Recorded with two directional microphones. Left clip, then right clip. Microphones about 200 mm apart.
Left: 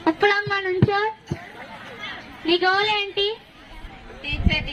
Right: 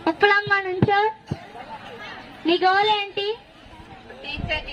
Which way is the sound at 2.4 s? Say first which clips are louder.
Right 1 dB; 40° left (ahead or behind).